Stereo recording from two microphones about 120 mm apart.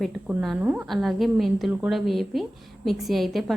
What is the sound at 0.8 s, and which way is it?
A woman's voice, centre (ahead or behind).